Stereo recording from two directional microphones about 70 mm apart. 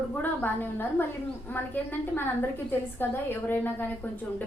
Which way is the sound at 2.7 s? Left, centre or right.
Left.